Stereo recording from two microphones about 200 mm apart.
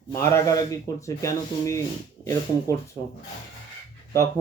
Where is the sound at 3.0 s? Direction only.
20° left (ahead or behind).